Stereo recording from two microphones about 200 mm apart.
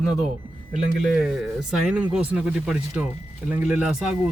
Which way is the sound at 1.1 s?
5° right (ahead or behind).